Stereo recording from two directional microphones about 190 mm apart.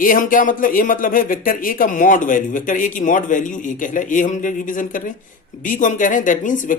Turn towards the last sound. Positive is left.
turn(degrees=45)  # may be behind; listen again after turning